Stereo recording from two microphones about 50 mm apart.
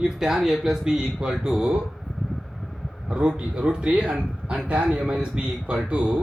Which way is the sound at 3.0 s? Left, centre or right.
Right.